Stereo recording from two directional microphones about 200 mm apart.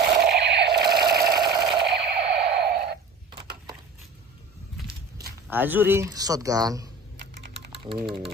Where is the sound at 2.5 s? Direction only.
55° right (ahead or behind).